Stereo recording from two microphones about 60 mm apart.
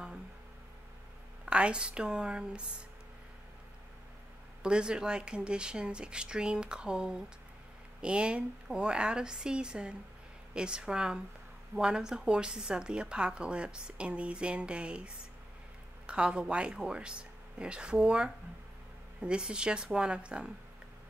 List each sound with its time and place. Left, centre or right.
1.4 s a woman's voice: centre
4.6 s a woman's voice: centre